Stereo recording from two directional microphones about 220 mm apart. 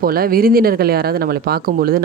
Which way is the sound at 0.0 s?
40° right (ahead or behind).